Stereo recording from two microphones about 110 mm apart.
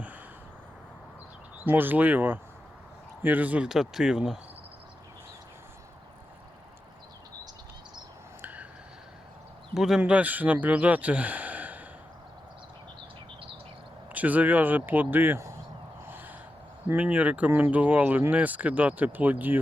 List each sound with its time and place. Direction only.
1.6 s speech: 15° right (ahead or behind)
8.4 s a sound: 15° right (ahead or behind)
9.7 s speech: 5° right (ahead or behind)
14.1 s speech: 15° right (ahead or behind)
16.0 s a sound: 20° right (ahead or behind)
16.9 s speech: 15° right (ahead or behind)